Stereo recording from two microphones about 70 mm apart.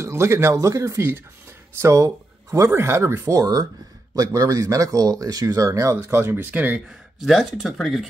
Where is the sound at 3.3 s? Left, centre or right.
Right.